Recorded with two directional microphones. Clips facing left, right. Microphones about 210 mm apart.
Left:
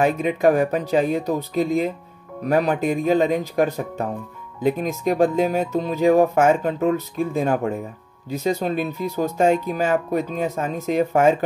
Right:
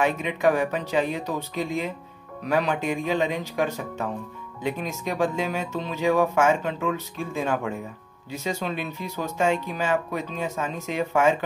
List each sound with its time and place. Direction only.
0.0 s speech: 40° left (ahead or behind)